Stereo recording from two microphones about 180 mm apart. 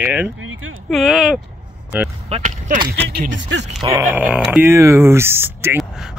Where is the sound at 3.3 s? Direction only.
90° right.